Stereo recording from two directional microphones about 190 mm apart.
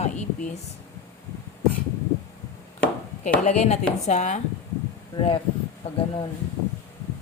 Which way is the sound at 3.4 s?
35° left (ahead or behind).